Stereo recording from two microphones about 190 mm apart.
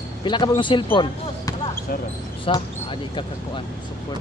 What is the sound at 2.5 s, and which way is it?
Speech, 30° left (ahead or behind).